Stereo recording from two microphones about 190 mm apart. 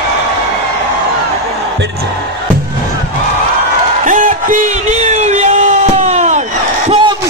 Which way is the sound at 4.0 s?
45° right (ahead or behind).